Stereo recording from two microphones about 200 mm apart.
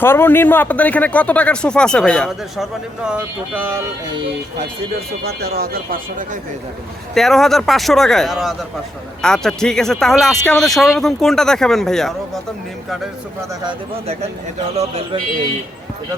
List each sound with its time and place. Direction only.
0.0 s speech: 10° left (ahead or behind); by 3.7 s 5° right (ahead or behind)
5.2 s speech: 50° right (ahead or behind)
7.1 s speech: centre (ahead or behind)
13.7 s speech: 30° right (ahead or behind)